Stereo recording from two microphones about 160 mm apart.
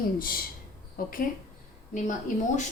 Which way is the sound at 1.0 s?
65° left (ahead or behind).